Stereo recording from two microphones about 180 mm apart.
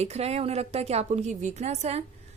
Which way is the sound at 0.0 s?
35° right (ahead or behind).